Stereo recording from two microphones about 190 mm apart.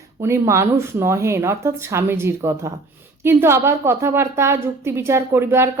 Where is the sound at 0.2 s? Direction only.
15° right (ahead or behind).